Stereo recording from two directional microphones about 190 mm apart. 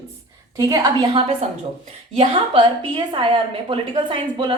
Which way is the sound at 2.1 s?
25° right (ahead or behind).